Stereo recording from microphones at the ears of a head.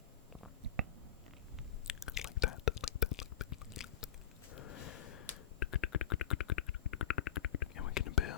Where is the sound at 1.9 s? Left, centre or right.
Left.